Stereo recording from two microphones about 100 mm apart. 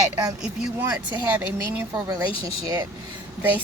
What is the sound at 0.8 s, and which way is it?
Speech, 20° right (ahead or behind).